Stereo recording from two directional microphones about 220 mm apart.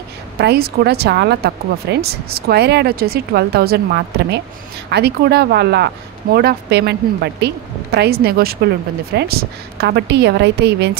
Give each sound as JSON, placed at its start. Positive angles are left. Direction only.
{"t": 0.4, "sound": "speech", "side_deg": -45}